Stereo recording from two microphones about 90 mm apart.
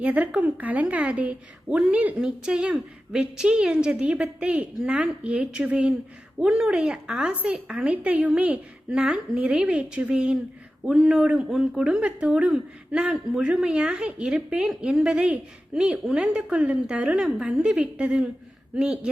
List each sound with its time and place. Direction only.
0.0 s speech: 15° right (ahead or behind)